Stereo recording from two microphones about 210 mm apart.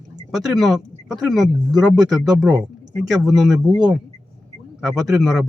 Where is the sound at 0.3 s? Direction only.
Centre (ahead or behind).